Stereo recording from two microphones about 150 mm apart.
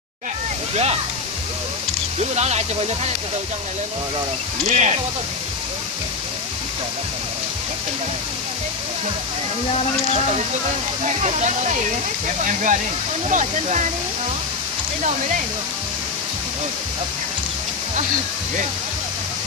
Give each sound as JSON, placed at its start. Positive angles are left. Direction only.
{"t": 2.3, "sound": "speech", "side_deg": -45}
{"t": 4.6, "sound": "speech", "side_deg": -50}
{"t": 11.1, "sound": "speech", "side_deg": -50}